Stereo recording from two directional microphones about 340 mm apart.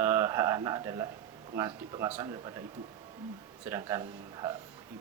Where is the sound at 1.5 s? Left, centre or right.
Centre.